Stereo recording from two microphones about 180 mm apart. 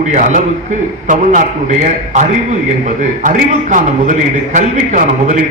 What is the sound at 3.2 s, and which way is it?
A man's voice, 45° right (ahead or behind).